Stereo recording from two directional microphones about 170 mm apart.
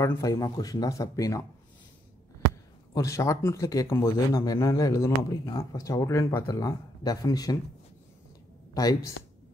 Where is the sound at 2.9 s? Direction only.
20° left (ahead or behind).